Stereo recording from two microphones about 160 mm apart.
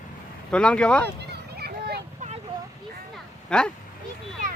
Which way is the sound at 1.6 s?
90° right.